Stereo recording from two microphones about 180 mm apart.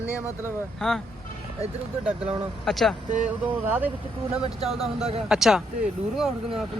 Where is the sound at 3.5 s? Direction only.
10° right (ahead or behind).